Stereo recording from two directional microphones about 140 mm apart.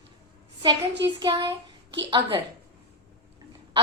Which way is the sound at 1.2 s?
35° right (ahead or behind).